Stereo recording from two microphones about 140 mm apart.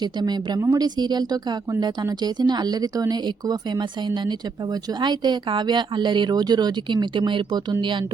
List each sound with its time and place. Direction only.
0.0 s a woman's voice: 30° right (ahead or behind)